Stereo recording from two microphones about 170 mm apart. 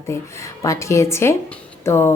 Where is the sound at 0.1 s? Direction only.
15° left (ahead or behind).